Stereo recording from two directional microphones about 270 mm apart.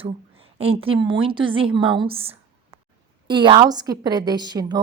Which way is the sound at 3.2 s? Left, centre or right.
Centre.